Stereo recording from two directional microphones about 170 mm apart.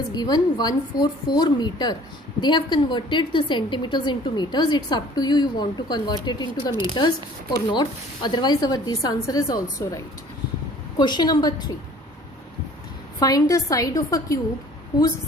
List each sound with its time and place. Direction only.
0.1 s a woman's voice: 25° left (ahead or behind)
13.1 s a woman's voice: 20° left (ahead or behind)